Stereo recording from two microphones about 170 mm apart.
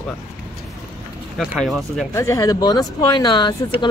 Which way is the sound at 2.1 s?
20° left (ahead or behind).